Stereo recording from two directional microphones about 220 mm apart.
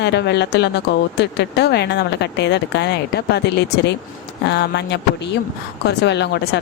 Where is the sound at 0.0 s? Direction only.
50° left (ahead or behind).